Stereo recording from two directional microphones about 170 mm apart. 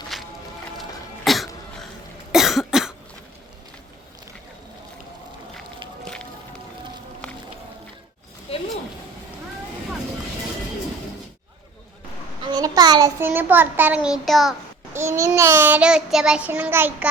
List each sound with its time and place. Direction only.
0.1 s music: centre (ahead or behind)
0.8 s cough: centre (ahead or behind)
12.4 s a child's voice: 20° right (ahead or behind); by 14.5 s centre (ahead or behind)
14.9 s a child's voice: 15° right (ahead or behind)
15.3 s child singing: 15° right (ahead or behind)